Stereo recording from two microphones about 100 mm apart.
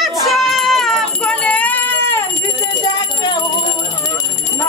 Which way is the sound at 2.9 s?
50° left (ahead or behind).